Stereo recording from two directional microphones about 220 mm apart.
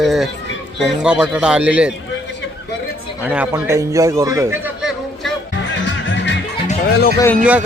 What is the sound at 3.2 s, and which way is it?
A man's voice, 5° right (ahead or behind).